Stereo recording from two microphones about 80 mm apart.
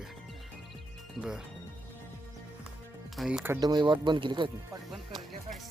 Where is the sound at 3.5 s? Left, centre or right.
Right.